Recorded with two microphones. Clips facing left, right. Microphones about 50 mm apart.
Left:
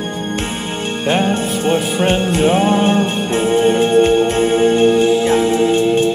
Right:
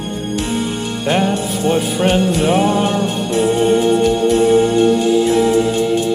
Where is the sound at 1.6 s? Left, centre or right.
Left.